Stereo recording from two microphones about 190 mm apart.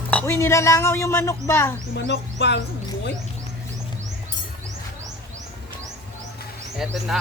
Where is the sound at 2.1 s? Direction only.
65° left (ahead or behind).